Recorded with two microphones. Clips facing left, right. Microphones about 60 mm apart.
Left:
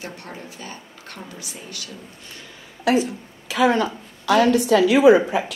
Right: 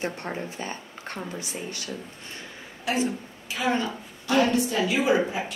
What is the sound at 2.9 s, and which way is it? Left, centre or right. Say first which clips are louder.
A woman's voice: left 6 dB; left.